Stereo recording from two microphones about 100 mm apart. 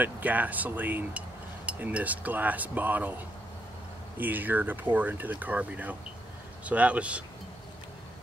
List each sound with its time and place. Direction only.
0.0 s speech: 15° right (ahead or behind)
4.2 s speech: 20° right (ahead or behind)